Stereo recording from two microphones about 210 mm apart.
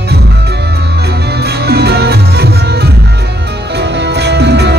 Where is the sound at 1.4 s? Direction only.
50° right (ahead or behind).